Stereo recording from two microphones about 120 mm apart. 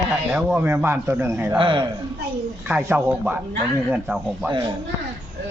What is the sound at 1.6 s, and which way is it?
Speech, 45° right (ahead or behind).